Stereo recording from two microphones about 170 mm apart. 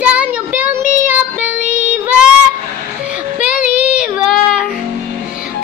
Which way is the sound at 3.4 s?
5° right (ahead or behind).